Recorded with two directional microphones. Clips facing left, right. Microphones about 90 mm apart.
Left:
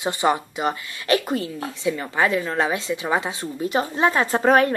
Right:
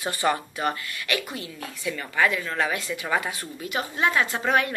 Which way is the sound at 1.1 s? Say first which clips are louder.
Left 10 dB; 35° left (ahead or behind).